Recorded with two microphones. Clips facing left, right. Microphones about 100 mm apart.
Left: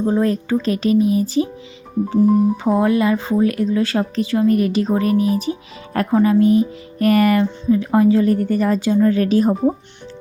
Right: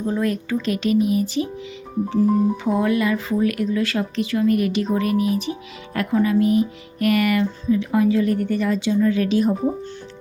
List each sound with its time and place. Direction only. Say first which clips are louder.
0.0 s speech: left 5 dB; 30° left (ahead or behind)